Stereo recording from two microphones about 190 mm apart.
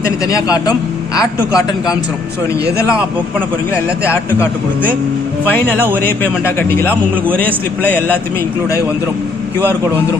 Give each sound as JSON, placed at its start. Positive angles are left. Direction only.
{"t": 0.3, "sound": "a man's voice", "side_deg": 20}
{"t": 6.2, "sound": "a man's voice", "side_deg": 10}
{"t": 7.9, "sound": "a man's voice", "side_deg": 10}